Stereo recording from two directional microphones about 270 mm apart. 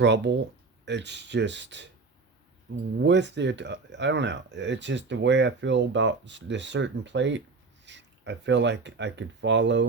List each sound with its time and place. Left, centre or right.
0.0 s speech: right
3.0 s speech: right